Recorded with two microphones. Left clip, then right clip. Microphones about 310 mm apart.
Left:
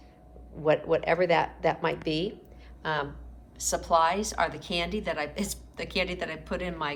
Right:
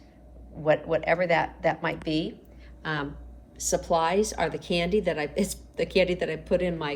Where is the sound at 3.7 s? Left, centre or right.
Left.